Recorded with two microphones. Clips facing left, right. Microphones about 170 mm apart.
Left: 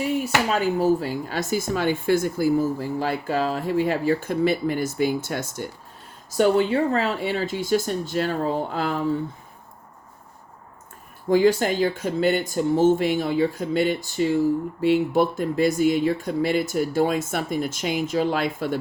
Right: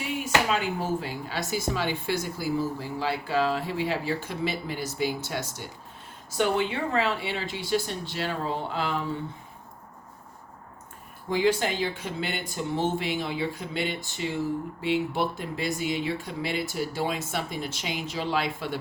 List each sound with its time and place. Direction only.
0.5 s speech: 40° left (ahead or behind)
11.3 s speech: 45° left (ahead or behind)